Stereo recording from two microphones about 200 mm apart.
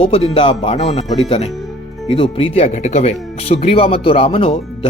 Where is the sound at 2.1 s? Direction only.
30° left (ahead or behind).